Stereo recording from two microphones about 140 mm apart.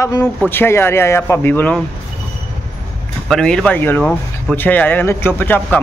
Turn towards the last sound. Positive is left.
turn(degrees=15)  # may be behind; listen again after turning